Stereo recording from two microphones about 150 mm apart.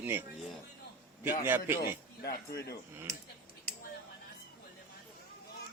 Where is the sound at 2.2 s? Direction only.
90° left.